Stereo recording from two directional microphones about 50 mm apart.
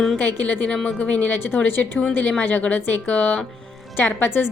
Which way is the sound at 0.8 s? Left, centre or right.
Left.